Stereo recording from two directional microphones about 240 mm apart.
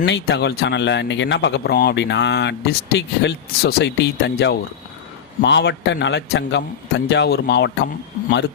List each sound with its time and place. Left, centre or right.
0.0 s speech: left